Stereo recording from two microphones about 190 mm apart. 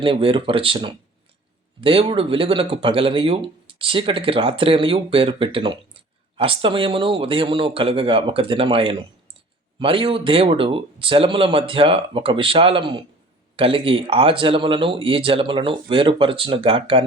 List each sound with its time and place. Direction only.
0.0 s speech: 30° right (ahead or behind)